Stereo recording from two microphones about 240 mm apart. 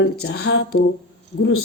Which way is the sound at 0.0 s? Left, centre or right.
Left.